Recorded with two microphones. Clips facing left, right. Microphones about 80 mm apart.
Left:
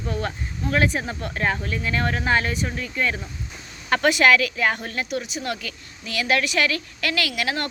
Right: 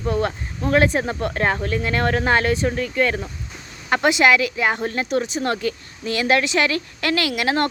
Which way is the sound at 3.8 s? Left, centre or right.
Right.